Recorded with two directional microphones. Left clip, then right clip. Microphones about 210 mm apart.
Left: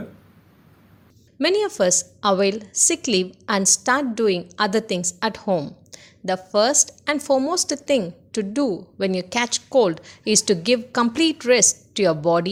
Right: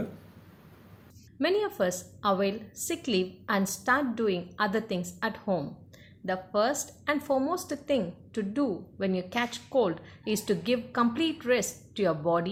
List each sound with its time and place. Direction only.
1.4 s a woman's voice: 45° left (ahead or behind)